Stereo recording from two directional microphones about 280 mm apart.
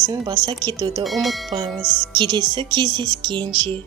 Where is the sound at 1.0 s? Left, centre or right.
Centre.